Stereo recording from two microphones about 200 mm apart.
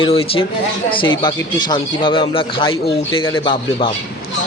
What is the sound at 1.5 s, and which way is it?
Speech, 20° left (ahead or behind).